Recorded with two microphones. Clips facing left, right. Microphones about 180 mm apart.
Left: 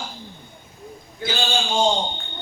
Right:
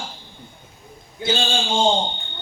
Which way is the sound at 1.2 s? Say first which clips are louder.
Right 2 dB; 25° right (ahead or behind).